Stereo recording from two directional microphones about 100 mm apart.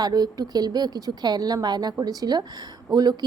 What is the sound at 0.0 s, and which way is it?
A woman's voice, 40° right (ahead or behind).